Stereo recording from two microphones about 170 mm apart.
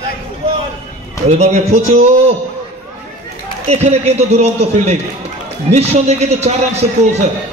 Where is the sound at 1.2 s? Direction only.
40° right (ahead or behind).